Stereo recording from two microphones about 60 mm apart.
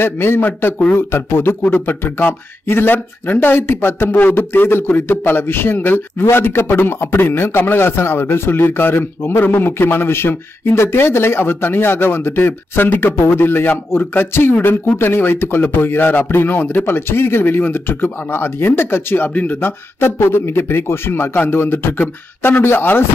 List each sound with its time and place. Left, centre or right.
0.0 s speech: left